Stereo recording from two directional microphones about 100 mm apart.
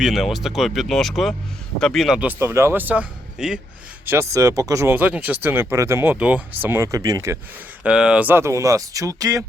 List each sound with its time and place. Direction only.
0.0 s speech: centre (ahead or behind)
2.2 s speech: 25° right (ahead or behind); by 3.6 s 5° right (ahead or behind)
4.0 s speech: 25° right (ahead or behind)
4.9 s speech: 15° right (ahead or behind)
6.7 s speech: 30° right (ahead or behind)
7.9 s speech: 10° right (ahead or behind)
8.3 s speech: 25° right (ahead or behind)